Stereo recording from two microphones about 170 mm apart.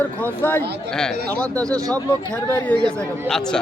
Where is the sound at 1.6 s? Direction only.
20° right (ahead or behind).